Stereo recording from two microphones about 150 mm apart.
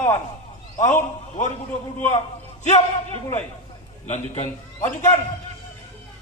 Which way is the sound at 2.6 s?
50° left (ahead or behind).